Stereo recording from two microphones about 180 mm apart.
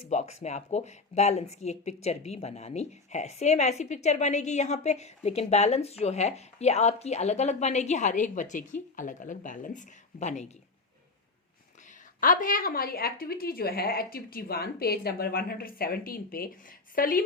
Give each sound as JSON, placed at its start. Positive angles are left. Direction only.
{"t": 0.1, "sound": "speech", "side_deg": 40}
{"t": 12.2, "sound": "a woman's voice", "side_deg": 50}